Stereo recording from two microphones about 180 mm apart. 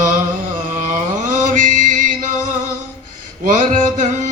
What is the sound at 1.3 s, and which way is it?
Chant, 45° right (ahead or behind).